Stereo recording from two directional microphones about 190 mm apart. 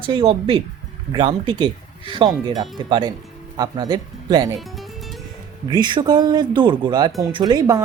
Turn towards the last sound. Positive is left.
turn(degrees=-20)  # may be behind; listen again after turning